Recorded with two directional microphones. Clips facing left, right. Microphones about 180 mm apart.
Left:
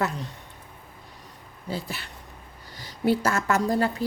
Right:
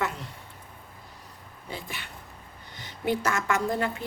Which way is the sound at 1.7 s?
40° left (ahead or behind).